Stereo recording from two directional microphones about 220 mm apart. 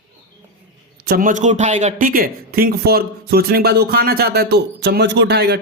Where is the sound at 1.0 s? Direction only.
40° right (ahead or behind).